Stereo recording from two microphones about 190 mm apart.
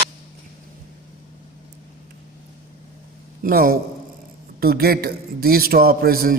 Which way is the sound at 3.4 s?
50° right (ahead or behind).